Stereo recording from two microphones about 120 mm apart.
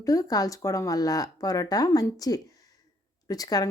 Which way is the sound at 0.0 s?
30° left (ahead or behind).